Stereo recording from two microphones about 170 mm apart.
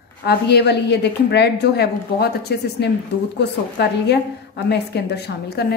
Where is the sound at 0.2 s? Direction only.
75° left (ahead or behind).